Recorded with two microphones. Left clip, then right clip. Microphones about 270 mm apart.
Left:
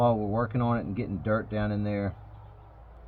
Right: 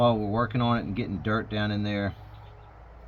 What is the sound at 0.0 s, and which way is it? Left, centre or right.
Speech, centre.